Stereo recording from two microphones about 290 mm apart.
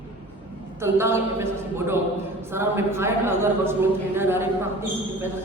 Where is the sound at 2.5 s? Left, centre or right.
Centre.